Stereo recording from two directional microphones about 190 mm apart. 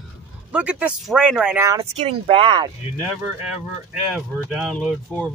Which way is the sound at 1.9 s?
30° right (ahead or behind).